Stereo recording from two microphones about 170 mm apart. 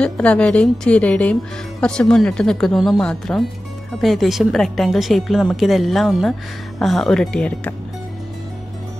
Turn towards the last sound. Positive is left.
turn(degrees=5)  # may be behind; listen again after turning